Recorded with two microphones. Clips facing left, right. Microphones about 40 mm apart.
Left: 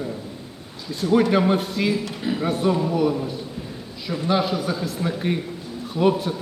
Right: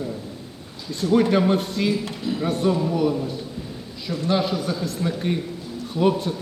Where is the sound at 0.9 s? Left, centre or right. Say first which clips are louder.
Even; centre.